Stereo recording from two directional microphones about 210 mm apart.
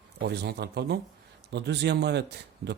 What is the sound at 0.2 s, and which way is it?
A man's voice, 50° right (ahead or behind).